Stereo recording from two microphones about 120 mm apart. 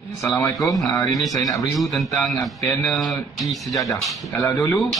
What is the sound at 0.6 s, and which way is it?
Speech, centre (ahead or behind).